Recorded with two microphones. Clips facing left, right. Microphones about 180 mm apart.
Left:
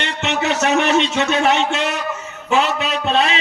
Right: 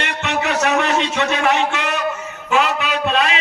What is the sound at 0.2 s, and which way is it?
A man's voice, 25° left (ahead or behind).